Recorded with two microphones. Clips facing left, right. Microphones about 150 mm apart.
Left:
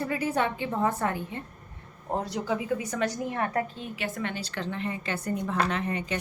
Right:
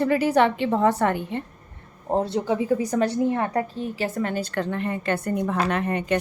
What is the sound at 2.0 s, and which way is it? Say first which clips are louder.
A woman's voice: right 6 dB; 30° right (ahead or behind).